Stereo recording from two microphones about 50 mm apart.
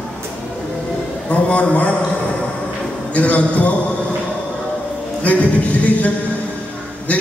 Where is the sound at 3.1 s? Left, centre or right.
Left.